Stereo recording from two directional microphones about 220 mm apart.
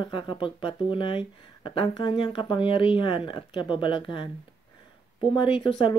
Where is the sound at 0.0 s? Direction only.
20° left (ahead or behind).